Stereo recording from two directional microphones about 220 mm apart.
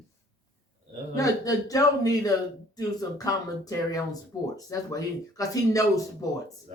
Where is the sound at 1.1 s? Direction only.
15° left (ahead or behind).